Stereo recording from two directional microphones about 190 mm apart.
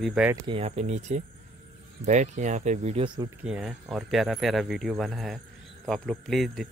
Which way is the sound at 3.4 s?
5° right (ahead or behind).